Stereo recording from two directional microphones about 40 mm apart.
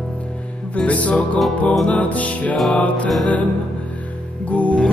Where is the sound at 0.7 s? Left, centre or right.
Left.